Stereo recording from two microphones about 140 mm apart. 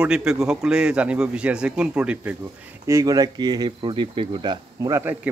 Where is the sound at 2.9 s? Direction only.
25° right (ahead or behind).